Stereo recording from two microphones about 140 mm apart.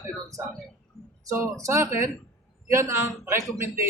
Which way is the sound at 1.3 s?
20° right (ahead or behind).